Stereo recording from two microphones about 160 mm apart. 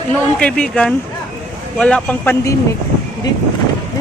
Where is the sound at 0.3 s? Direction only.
5° left (ahead or behind).